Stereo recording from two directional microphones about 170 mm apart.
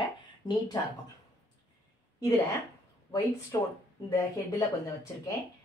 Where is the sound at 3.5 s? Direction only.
20° left (ahead or behind).